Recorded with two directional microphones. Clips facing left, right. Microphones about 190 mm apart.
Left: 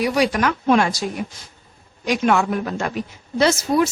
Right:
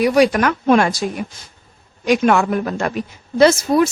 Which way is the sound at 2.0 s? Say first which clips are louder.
Right 4 dB; 55° right (ahead or behind).